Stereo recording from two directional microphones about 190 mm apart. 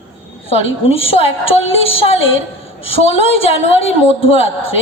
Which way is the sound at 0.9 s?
30° left (ahead or behind).